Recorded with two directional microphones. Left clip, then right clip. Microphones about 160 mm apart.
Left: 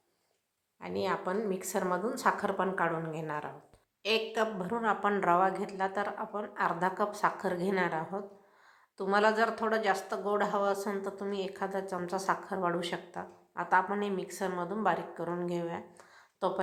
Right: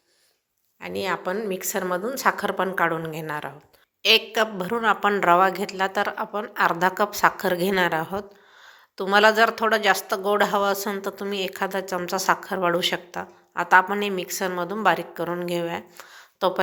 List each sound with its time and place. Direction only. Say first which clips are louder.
0.8 s a woman's voice: right 6 dB; 15° right (ahead or behind)